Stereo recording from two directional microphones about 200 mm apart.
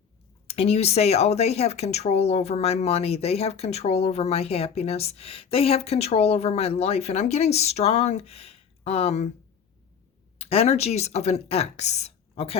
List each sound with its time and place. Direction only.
0.4 s speech: 30° left (ahead or behind)
10.3 s speech: 30° left (ahead or behind)